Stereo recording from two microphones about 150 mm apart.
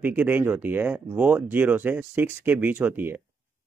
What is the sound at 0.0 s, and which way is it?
Speech, 10° right (ahead or behind).